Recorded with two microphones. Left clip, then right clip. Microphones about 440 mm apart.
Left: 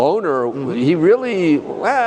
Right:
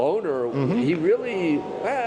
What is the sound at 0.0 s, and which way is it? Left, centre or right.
Speech, left.